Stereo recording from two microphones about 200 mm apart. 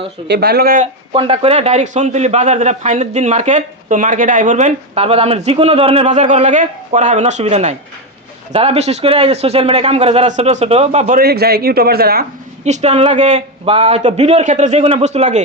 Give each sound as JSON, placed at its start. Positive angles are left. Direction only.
{"t": 0.3, "sound": "a man's voice", "side_deg": -55}
{"t": 1.1, "sound": "a man's voice", "side_deg": -30}
{"t": 11.2, "sound": "a man's voice", "side_deg": -50}
{"t": 12.6, "sound": "a man's voice", "side_deg": -35}